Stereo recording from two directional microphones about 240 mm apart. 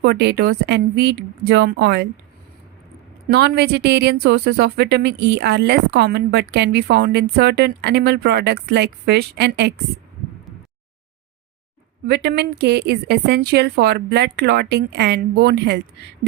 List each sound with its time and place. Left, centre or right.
0.0 s a woman's voice: right
3.2 s a woman's voice: right
12.0 s a woman's voice: right